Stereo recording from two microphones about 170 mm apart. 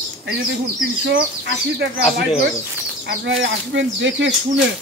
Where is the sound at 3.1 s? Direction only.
90° right.